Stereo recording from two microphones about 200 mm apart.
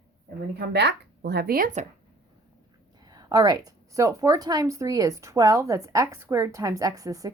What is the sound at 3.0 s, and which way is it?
A woman's voice, 20° right (ahead or behind).